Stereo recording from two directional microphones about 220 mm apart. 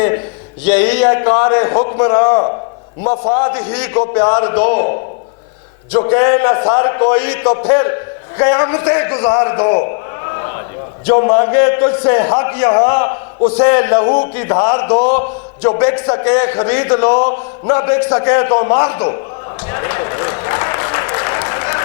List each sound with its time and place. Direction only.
0.6 s a man's voice: 10° left (ahead or behind)
5.9 s a man's voice: 25° left (ahead or behind)
6.1 s a man's voice: 15° left (ahead or behind)
10.3 s a sound: 20° left (ahead or behind)
11.1 s a man's voice: 20° left (ahead or behind)
19.6 s applause: 20° left (ahead or behind)